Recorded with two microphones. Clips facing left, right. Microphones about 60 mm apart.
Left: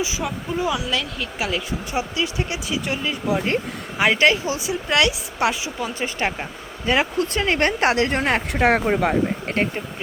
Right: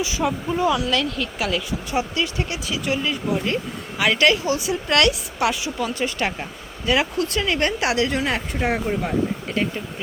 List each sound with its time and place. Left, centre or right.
0.2 s speech: centre
0.6 s a woman's voice: centre; by 8.4 s left
8.5 s speech: left